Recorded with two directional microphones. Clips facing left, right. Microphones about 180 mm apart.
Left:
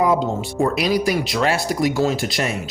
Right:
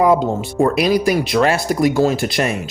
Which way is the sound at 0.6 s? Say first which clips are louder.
Right 4 dB; 55° right (ahead or behind).